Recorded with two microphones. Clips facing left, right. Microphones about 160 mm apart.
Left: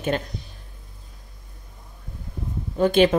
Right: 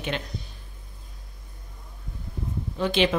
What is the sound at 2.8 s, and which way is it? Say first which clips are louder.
Speech: left 6 dB; 45° left (ahead or behind).